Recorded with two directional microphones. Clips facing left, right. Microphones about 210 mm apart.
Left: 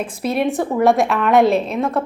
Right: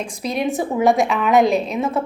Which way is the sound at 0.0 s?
5° left (ahead or behind).